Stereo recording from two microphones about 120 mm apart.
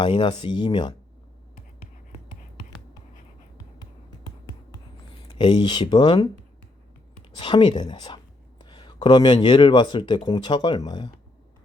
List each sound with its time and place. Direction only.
0.0 s speech: 40° left (ahead or behind)
5.3 s speech: 40° left (ahead or behind)
7.3 s speech: 40° left (ahead or behind)